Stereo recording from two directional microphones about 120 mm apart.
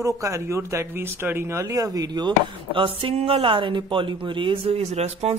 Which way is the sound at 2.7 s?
45° right (ahead or behind).